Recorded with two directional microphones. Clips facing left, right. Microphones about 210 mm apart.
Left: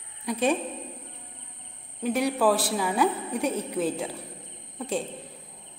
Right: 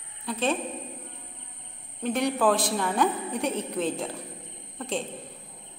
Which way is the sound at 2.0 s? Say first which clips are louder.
Left 1 dB; 5° left (ahead or behind).